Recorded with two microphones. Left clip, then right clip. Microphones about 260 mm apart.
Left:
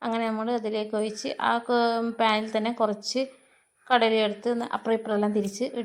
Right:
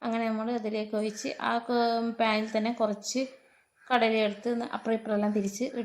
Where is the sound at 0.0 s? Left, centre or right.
Centre.